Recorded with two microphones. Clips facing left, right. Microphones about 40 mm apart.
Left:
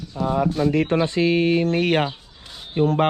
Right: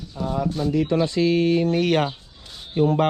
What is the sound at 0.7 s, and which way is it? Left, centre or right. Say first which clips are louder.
Speech: left 2 dB; left.